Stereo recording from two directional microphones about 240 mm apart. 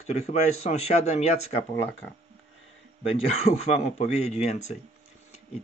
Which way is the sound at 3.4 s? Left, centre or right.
Left.